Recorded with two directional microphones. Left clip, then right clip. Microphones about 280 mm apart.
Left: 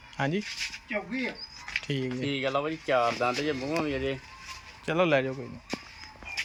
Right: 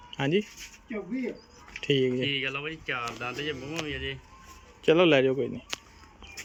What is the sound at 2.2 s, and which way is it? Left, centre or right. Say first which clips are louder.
Speech: left 1 dB; centre.